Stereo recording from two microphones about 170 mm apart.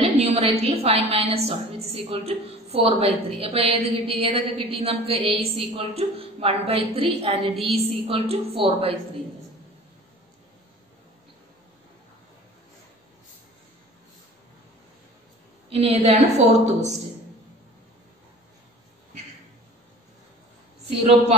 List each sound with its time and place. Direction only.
0.0 s a woman's voice: 35° right (ahead or behind)
15.7 s a woman's voice: 35° right (ahead or behind)